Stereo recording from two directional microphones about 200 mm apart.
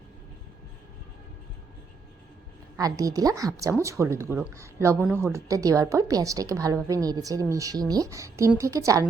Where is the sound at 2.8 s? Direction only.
15° right (ahead or behind).